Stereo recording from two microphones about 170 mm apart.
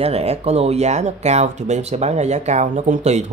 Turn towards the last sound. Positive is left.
turn(degrees=-40)  # may be behind; listen again after turning